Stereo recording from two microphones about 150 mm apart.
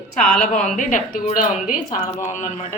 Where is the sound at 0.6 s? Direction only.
60° left (ahead or behind).